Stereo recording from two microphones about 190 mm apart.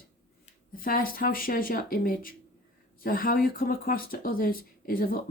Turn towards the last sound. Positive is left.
turn(degrees=50)  # may be behind; listen again after turning